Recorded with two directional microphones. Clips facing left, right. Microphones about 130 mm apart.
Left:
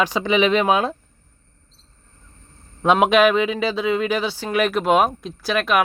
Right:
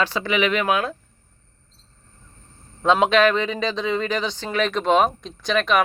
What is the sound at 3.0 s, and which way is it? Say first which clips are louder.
Speech: left 3 dB; 10° left (ahead or behind).